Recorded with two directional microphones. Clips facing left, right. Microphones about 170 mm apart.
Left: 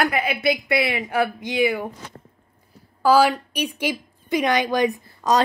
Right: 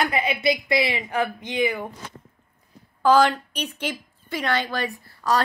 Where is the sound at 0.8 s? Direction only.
5° left (ahead or behind).